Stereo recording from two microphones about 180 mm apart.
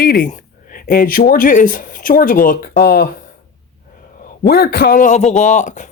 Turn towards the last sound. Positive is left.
turn(degrees=45)  # may be behind; listen again after turning